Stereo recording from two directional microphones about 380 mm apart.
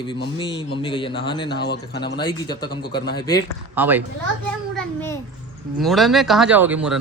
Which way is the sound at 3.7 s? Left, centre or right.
Centre.